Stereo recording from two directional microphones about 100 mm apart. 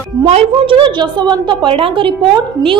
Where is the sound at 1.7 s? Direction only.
65° right (ahead or behind).